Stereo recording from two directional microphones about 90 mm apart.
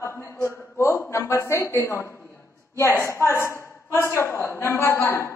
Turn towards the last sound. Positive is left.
turn(degrees=30)  # may be behind; listen again after turning